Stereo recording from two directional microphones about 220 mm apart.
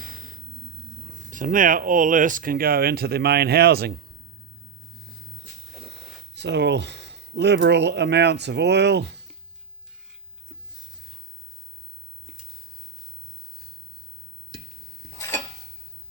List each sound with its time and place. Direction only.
0.0 s music: 40° right (ahead or behind)
1.1 s speech: 35° right (ahead or behind)
6.3 s speech: 50° right (ahead or behind)